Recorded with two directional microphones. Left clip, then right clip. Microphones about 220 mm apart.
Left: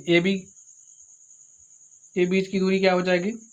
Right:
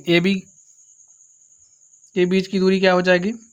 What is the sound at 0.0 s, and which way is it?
Speech, 45° right (ahead or behind).